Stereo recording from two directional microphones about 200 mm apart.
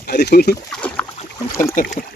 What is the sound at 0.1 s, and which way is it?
Speech, 55° left (ahead or behind).